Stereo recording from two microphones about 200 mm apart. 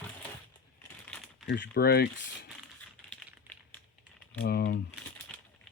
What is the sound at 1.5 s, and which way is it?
Speech, 55° left (ahead or behind).